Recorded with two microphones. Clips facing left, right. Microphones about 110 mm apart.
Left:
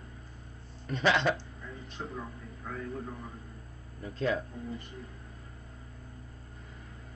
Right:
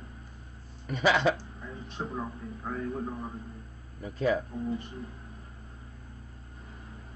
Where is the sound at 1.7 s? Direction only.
35° right (ahead or behind).